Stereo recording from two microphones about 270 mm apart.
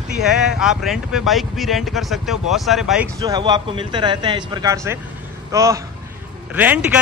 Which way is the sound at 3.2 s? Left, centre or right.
Centre.